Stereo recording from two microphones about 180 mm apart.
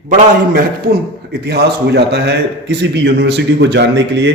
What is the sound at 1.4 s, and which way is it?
A man's voice, 65° right (ahead or behind).